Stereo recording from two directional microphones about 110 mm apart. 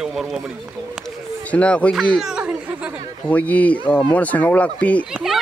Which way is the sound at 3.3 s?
15° left (ahead or behind).